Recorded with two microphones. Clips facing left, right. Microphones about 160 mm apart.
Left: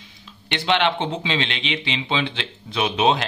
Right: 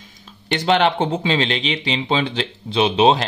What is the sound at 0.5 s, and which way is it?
Speech, 40° right (ahead or behind).